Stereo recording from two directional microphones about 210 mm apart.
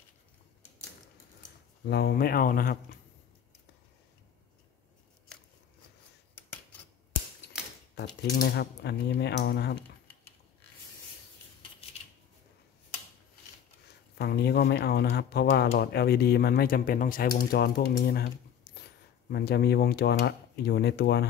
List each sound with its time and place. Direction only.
1.9 s speech: 50° left (ahead or behind)
8.2 s speech: 45° left (ahead or behind)
14.1 s speech: 50° left (ahead or behind)